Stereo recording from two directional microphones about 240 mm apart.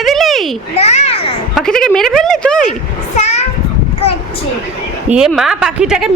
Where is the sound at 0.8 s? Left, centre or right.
Left.